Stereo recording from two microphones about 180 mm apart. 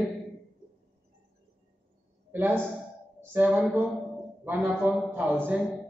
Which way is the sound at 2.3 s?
10° right (ahead or behind).